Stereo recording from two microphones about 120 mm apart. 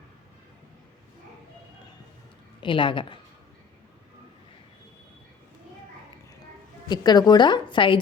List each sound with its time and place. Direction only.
2.6 s a woman's voice: 45° left (ahead or behind)
6.8 s a woman's voice: 35° left (ahead or behind)